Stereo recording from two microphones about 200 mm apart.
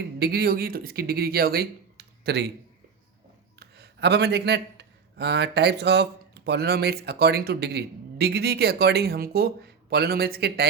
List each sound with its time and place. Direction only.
0.2 s speech: 50° right (ahead or behind)
3.6 s a man's voice: 55° right (ahead or behind)